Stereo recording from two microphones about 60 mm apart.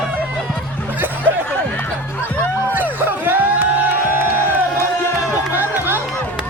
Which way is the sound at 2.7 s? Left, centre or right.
Right.